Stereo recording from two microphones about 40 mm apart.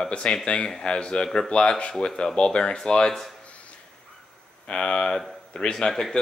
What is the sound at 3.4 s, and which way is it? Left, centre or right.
Music, left.